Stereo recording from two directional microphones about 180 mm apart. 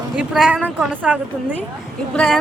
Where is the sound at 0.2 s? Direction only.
5° right (ahead or behind).